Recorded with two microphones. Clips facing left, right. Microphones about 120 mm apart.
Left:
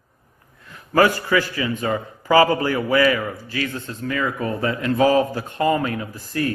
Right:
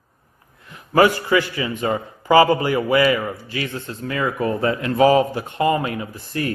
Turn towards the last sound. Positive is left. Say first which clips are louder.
# left 1 dB
turn(degrees=-25)  # may be behind; listen again after turning